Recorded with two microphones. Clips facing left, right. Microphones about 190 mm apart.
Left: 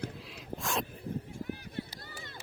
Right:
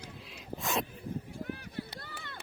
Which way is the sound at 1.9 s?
60° right (ahead or behind).